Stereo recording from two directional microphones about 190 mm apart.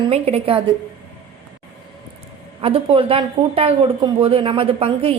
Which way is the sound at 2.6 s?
30° right (ahead or behind).